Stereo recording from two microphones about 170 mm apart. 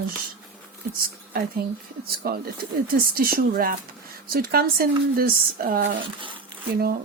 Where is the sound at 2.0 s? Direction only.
65° right (ahead or behind).